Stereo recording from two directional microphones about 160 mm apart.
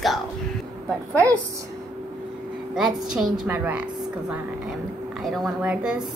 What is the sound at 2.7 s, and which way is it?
A woman's voice, 5° right (ahead or behind).